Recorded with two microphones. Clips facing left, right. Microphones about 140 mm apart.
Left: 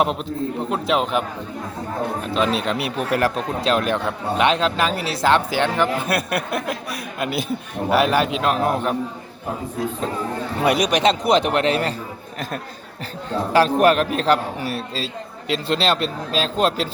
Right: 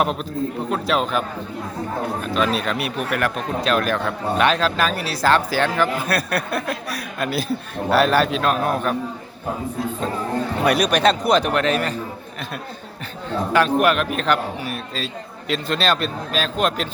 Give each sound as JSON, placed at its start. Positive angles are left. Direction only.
{"t": 0.7, "sound": "speech", "side_deg": 20}
{"t": 2.2, "sound": "speech", "side_deg": 25}
{"t": 10.6, "sound": "speech", "side_deg": 20}
{"t": 13.5, "sound": "speech", "side_deg": 35}